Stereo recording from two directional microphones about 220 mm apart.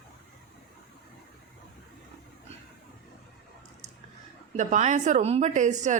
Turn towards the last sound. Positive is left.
turn(degrees=-35)  # may be behind; listen again after turning